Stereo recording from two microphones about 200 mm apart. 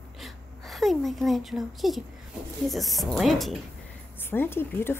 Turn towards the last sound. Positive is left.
turn(degrees=10)  # may be behind; listen again after turning